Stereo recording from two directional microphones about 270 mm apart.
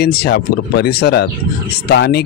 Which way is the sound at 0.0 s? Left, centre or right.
Left.